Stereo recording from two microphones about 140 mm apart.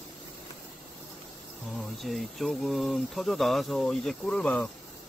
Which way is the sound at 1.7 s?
Centre (ahead or behind).